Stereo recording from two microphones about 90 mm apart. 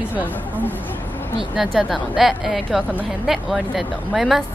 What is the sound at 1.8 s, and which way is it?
A woman's voice, 5° right (ahead or behind).